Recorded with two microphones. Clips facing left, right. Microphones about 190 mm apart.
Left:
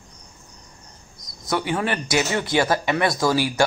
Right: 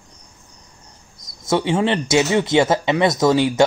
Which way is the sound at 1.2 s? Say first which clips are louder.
Right 5 dB; 25° right (ahead or behind).